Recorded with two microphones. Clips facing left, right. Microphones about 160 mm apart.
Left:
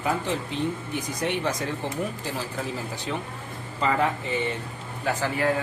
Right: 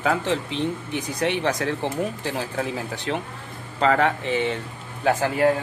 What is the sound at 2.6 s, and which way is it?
Speech, 75° right (ahead or behind).